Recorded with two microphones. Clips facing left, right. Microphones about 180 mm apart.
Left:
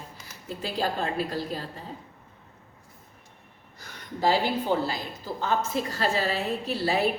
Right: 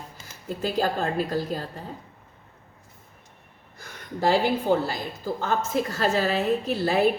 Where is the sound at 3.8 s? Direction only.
50° right (ahead or behind).